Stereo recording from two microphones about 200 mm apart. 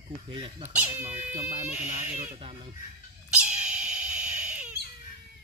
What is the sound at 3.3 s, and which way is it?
Dog, 5° right (ahead or behind).